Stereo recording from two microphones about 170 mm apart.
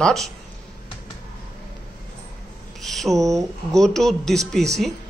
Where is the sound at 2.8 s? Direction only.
Centre (ahead or behind).